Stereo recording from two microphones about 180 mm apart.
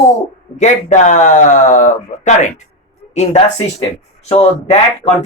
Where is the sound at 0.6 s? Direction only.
40° left (ahead or behind).